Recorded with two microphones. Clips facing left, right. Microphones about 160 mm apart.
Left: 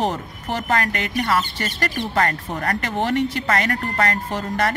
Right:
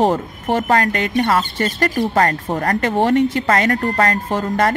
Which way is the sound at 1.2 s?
40° right (ahead or behind).